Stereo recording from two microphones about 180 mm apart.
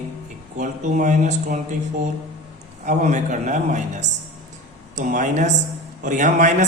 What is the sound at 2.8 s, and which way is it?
Speech, 40° right (ahead or behind).